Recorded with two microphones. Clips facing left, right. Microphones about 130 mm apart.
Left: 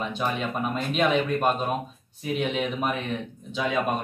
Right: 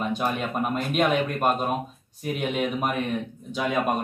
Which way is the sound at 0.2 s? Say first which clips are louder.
Right 1 dB; 10° right (ahead or behind).